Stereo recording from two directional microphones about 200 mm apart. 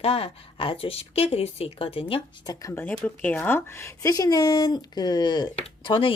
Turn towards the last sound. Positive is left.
turn(degrees=25)  # may be behind; listen again after turning